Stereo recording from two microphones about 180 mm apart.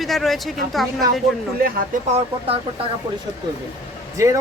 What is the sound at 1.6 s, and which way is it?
Speech, 55° right (ahead or behind).